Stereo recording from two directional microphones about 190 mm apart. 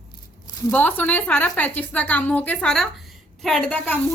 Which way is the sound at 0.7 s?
10° left (ahead or behind).